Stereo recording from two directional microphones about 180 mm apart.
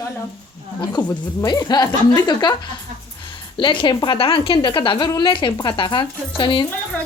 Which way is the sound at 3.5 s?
30° left (ahead or behind).